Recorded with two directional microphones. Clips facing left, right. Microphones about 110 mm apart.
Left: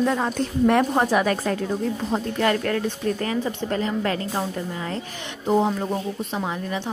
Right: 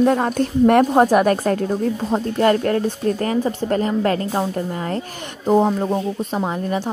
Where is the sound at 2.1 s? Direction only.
35° right (ahead or behind).